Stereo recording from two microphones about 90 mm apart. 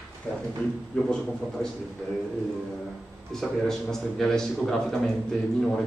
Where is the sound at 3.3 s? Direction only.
5° left (ahead or behind).